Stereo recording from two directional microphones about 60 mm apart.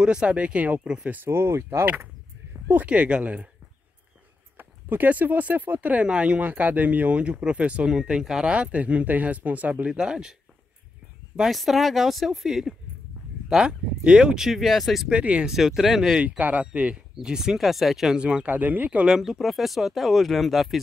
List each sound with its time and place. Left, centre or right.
0.0 s speech: centre
1.2 s speech: right
2.9 s speech: centre
4.6 s speech: right
9.8 s speech: centre
11.5 s speech: centre
15.0 s speech: centre
15.5 s speech: centre
16.2 s speech: right
17.1 s speech: centre
18.2 s speech: right
19.0 s speech: centre